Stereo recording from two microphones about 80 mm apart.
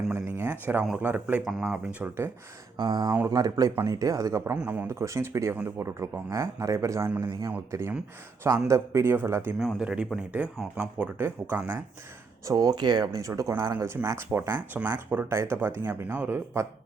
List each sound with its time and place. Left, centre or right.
0.3 s speech: right
1.4 s speech: centre
1.7 s speech: centre
2.7 s speech: right
3.2 s speech: right
4.5 s speech: centre
4.9 s a man's voice: right
7.2 s speech: right
7.7 s a man's voice: right
8.4 s a man's voice: right
9.7 s speech: centre
12.5 s speech: right
13.2 s speech: right
13.8 s a man's voice: right